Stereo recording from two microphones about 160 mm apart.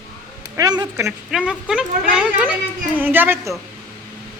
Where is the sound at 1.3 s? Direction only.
5° right (ahead or behind).